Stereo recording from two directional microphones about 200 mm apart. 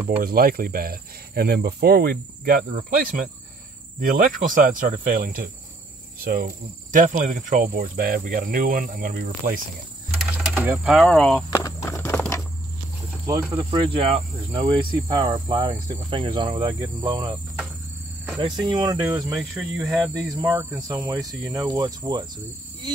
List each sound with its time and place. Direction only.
0.2 s speech: 45° right (ahead or behind)
10.5 s speech: 10° right (ahead or behind); by 11.6 s 5° left (ahead or behind)
11.6 s clip-clop: 15° left (ahead or behind)
13.3 s speech: 20° right (ahead or behind)
18.4 s speech: 25° right (ahead or behind)